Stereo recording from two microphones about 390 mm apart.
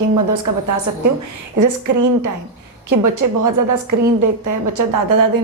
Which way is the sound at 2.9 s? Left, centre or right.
Right.